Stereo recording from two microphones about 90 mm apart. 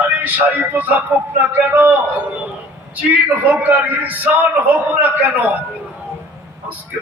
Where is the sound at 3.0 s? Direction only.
20° right (ahead or behind).